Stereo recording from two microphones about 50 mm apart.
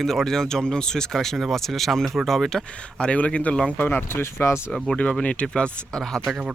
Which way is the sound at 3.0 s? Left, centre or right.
Left.